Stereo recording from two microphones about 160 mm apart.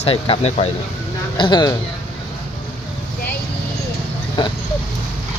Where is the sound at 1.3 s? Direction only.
30° left (ahead or behind).